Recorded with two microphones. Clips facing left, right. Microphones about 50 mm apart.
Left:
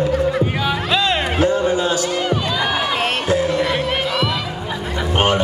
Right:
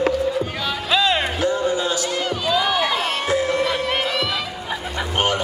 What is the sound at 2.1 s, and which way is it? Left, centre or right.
Music, centre.